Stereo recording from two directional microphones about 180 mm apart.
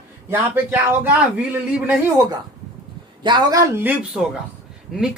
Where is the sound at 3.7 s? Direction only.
10° right (ahead or behind).